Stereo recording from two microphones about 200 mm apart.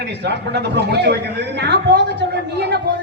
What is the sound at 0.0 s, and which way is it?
A woman's voice, 55° right (ahead or behind).